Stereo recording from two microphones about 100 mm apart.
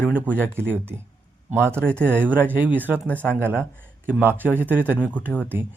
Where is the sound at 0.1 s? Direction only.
20° right (ahead or behind).